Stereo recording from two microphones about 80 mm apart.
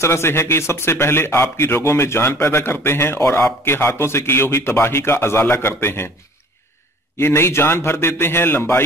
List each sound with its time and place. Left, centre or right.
0.0 s speech: left
7.2 s speech: left